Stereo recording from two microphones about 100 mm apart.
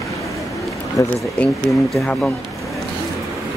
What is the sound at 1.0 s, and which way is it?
Speech, 30° left (ahead or behind).